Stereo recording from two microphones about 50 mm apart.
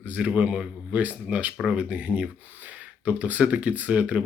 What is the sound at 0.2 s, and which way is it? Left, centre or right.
Speech, right.